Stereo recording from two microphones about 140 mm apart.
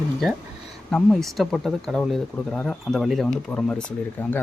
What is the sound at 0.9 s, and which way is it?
Speech, 5° left (ahead or behind).